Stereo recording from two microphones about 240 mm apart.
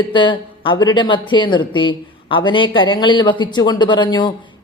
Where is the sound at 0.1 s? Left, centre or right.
Left.